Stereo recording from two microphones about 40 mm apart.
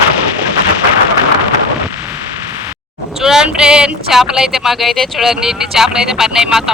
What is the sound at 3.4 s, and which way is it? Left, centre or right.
Speech, right.